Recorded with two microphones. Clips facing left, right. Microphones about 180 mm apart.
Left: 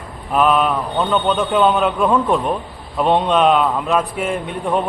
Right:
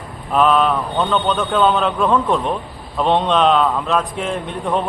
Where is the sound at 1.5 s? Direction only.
15° left (ahead or behind).